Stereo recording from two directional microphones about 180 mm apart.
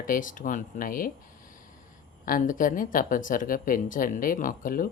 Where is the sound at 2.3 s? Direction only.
50° left (ahead or behind).